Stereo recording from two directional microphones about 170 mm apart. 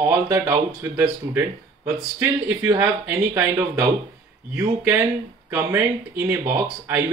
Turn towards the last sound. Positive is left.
turn(degrees=-15)  # may be behind; listen again after turning